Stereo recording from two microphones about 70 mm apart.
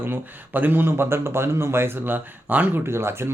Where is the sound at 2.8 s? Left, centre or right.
Right.